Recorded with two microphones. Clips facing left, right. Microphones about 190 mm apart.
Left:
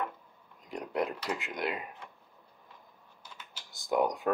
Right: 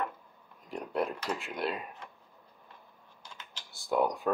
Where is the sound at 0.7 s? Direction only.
15° left (ahead or behind).